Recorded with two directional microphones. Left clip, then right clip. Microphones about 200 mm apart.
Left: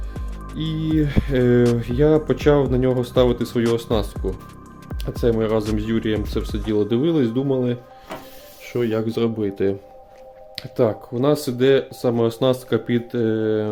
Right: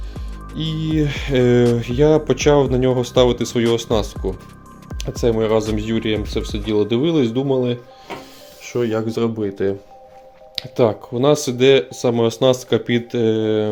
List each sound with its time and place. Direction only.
0.1 s speech: centre (ahead or behind); by 9.7 s 15° left (ahead or behind)
10.5 s speech: 5° left (ahead or behind)